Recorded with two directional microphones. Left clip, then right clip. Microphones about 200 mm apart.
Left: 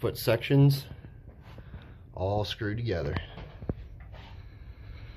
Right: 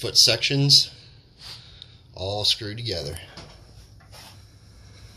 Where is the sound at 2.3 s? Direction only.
15° right (ahead or behind).